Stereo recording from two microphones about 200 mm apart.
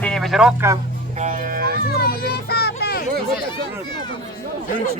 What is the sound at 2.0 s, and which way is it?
Music, 50° left (ahead or behind).